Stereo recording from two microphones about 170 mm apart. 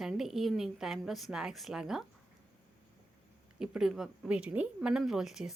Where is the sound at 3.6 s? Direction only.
5° right (ahead or behind).